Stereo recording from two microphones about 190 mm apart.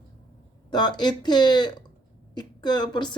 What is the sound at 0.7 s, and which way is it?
Speech, 20° left (ahead or behind).